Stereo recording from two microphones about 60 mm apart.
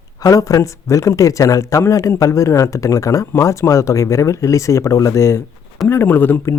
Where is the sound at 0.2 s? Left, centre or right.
Left.